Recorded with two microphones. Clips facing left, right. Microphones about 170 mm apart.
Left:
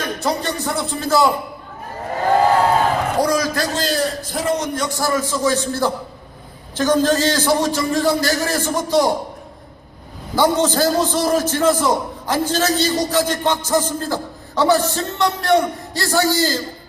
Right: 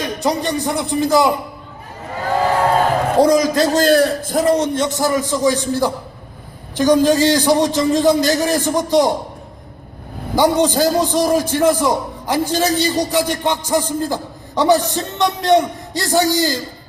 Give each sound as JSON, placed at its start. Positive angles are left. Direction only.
{"t": 0.0, "sound": "a man's voice", "side_deg": -15}
{"t": 3.2, "sound": "a man's voice", "side_deg": -20}
{"t": 3.8, "sound": "a man's voice", "side_deg": -55}
{"t": 10.3, "sound": "a man's voice", "side_deg": -15}